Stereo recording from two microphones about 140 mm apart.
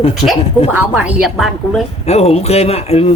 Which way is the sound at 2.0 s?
50° left (ahead or behind).